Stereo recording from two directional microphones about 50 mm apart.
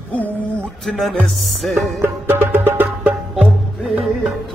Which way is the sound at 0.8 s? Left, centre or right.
Centre.